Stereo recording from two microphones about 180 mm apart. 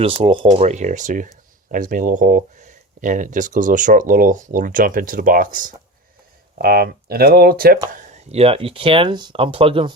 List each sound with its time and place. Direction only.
0.0 s speech: 30° right (ahead or behind); by 5.7 s 50° right (ahead or behind)
6.6 s speech: 60° right (ahead or behind)
8.1 s speech: 35° right (ahead or behind)